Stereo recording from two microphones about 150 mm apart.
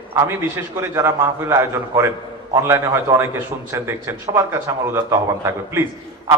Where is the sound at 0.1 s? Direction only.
15° right (ahead or behind).